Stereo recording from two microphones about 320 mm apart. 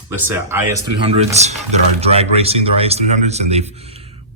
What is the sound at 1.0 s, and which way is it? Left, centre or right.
Speech, centre.